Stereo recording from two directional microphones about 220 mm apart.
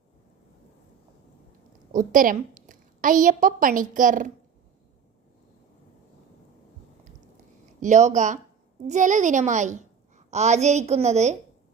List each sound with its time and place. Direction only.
1.9 s a woman's voice: 35° right (ahead or behind)
7.8 s a woman's voice: 35° right (ahead or behind)